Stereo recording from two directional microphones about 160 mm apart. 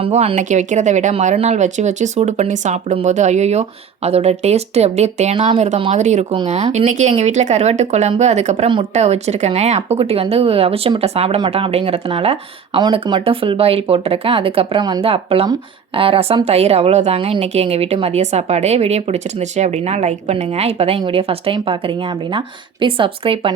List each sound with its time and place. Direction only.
0.0 s speech: 35° right (ahead or behind)